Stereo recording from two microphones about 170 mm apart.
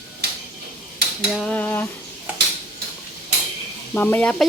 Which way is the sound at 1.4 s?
10° left (ahead or behind).